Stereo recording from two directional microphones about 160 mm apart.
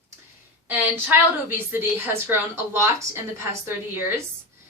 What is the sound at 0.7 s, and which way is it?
A woman's voice, 10° right (ahead or behind).